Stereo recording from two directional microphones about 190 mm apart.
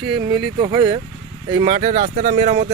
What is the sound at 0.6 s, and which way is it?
Speech, 25° right (ahead or behind).